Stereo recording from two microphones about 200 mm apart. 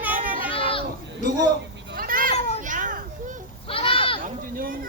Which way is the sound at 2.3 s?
30° left (ahead or behind).